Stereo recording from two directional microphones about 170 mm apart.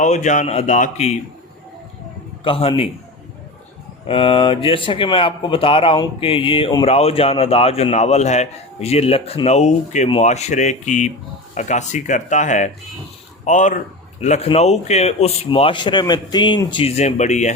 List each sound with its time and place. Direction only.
0.0 s speech: 45° left (ahead or behind)
2.4 s a man's voice: 30° left (ahead or behind)
4.1 s a man's voice: 30° left (ahead or behind)
17.0 s speech: 40° left (ahead or behind)